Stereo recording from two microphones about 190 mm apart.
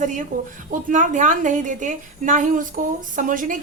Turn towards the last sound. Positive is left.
turn(degrees=-45)  # may be behind; listen again after turning